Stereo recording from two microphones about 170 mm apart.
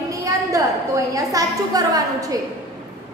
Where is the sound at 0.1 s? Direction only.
20° right (ahead or behind).